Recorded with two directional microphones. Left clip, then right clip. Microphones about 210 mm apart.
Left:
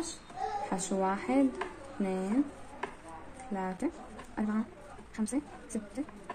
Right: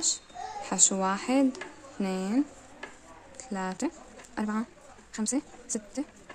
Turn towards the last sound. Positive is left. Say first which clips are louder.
# right 4 dB
turn(degrees=-35)  # may be behind; listen again after turning